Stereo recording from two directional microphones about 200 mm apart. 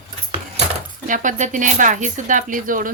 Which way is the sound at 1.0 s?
40° right (ahead or behind).